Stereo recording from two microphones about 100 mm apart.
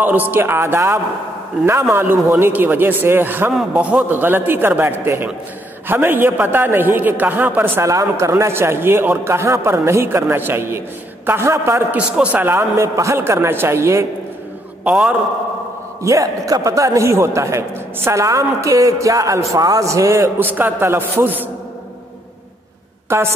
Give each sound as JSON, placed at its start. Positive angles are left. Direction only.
{"t": 0.3, "sound": "a man's voice", "side_deg": -25}
{"t": 11.9, "sound": "a man's voice", "side_deg": -10}
{"t": 14.9, "sound": "a man's voice", "side_deg": -5}
{"t": 16.0, "sound": "a man's voice", "side_deg": -35}
{"t": 20.3, "sound": "a man's voice", "side_deg": -20}